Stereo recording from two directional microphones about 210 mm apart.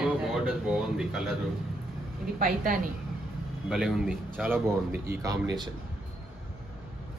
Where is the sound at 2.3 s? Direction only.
40° right (ahead or behind).